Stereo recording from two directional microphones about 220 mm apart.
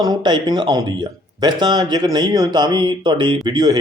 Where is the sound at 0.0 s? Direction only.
20° right (ahead or behind).